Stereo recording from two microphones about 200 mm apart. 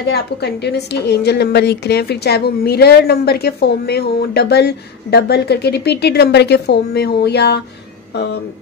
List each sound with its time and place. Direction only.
0.1 s a woman's voice: 55° left (ahead or behind)